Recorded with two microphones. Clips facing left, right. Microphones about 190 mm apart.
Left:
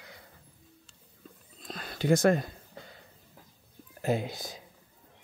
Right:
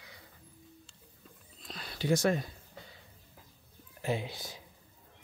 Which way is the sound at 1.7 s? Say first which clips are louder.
Left 4 dB; 50° left (ahead or behind).